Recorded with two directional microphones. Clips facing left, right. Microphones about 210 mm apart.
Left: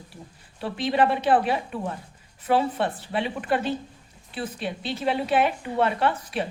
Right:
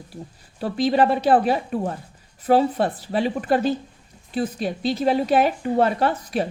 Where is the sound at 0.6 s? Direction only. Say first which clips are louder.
Right 4 dB; 40° right (ahead or behind).